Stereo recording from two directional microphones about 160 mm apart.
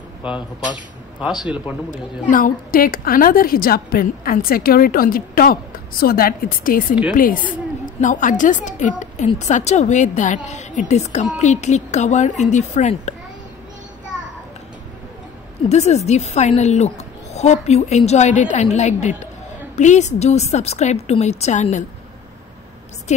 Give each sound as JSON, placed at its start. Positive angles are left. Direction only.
{"t": 1.4, "sound": "speech", "side_deg": -10}
{"t": 1.9, "sound": "a woman's voice", "side_deg": 55}
{"t": 15.7, "sound": "a woman's voice", "side_deg": 45}